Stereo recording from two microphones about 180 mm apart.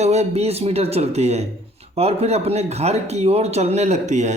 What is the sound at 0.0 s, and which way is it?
Speech, 35° right (ahead or behind).